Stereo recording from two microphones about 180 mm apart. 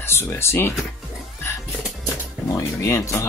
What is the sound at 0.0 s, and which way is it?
Speech, 15° left (ahead or behind).